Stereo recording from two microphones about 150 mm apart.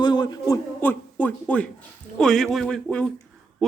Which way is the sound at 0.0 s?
30° left (ahead or behind).